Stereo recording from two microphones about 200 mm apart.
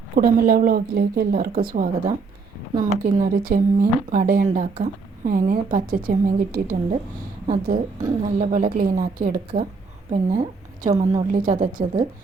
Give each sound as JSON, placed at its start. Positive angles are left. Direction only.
{"t": 0.2, "sound": "a woman's voice", "side_deg": -45}
{"t": 8.2, "sound": "a woman's voice", "side_deg": -35}